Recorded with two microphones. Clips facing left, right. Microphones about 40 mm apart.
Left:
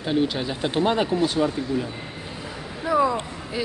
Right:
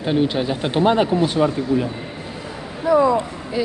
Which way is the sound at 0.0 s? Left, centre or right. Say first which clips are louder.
Right 4 dB; right.